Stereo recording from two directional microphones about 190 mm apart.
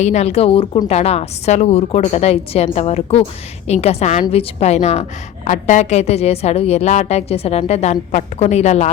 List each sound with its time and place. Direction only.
0.0 s a woman's voice: 35° left (ahead or behind)